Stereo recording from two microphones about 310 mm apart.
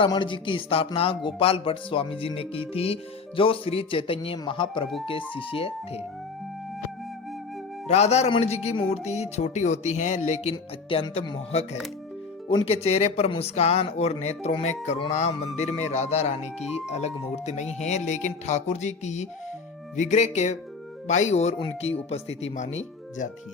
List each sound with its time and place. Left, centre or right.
0.0 s speech: centre
7.9 s speech: left
12.5 s speech: centre